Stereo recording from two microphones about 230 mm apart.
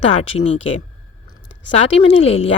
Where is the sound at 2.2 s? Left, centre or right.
Left.